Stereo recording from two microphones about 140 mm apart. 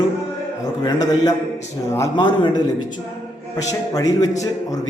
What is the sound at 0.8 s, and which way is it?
A man's voice, 30° left (ahead or behind).